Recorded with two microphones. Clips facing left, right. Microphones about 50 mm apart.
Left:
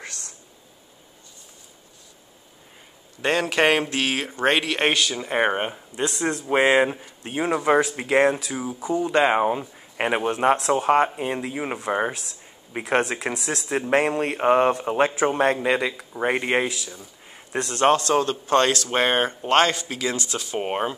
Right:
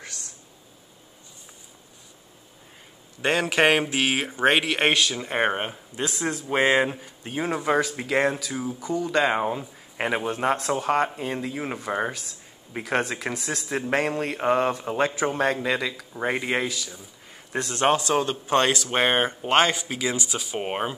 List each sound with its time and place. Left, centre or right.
0.0 s whispering: left
3.2 s speech: centre
6.4 s speech: centre
15.3 s a man's voice: left; by 20.9 s centre